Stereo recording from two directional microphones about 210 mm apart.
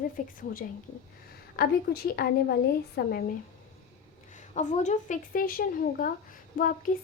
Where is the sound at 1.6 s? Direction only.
45° left (ahead or behind).